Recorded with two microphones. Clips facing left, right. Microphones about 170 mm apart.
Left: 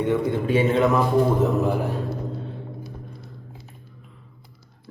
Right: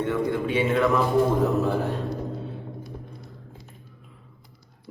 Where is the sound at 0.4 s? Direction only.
40° left (ahead or behind).